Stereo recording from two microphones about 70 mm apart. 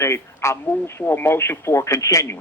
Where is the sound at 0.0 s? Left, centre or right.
Left.